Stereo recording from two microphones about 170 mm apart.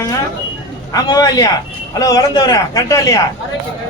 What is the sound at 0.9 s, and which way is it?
A man's voice, 20° left (ahead or behind).